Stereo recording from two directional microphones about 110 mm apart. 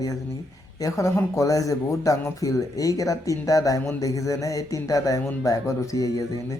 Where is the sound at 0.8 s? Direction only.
30° left (ahead or behind).